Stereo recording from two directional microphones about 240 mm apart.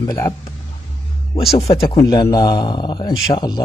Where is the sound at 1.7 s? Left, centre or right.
Centre.